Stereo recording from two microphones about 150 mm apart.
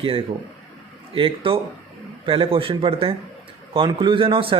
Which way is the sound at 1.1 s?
35° right (ahead or behind).